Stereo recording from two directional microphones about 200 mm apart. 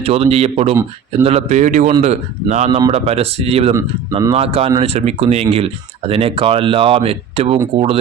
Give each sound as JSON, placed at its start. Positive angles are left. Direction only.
{"t": 0.0, "sound": "speech", "side_deg": -30}